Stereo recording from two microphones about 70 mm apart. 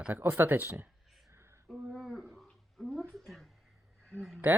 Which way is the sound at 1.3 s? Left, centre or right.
Right.